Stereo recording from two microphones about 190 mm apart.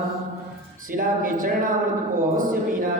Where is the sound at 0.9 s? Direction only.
45° right (ahead or behind).